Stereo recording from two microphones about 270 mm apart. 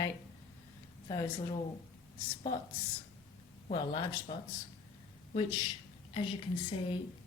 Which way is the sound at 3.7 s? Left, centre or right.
Centre.